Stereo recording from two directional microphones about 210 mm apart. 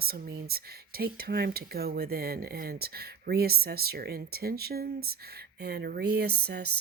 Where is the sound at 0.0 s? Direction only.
45° right (ahead or behind).